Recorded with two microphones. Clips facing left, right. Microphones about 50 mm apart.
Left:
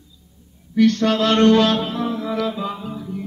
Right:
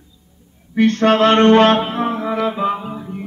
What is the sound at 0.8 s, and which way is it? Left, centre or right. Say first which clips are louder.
Mantra: right 3 dB; right.